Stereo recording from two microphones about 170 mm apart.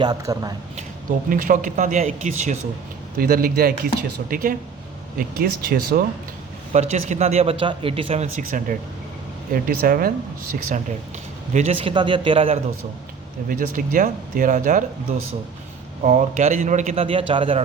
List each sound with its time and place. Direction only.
0.0 s a man's voice: 25° right (ahead or behind)
1.3 s a man's voice: 55° right (ahead or behind)
3.2 s speech: 60° right (ahead or behind)
6.7 s speech: 40° right (ahead or behind)
8.4 s speech: 55° right (ahead or behind)
10.5 s a man's voice: 45° right (ahead or behind)
13.5 s a man's voice: 55° right (ahead or behind)
16.0 s a man's voice: 45° right (ahead or behind)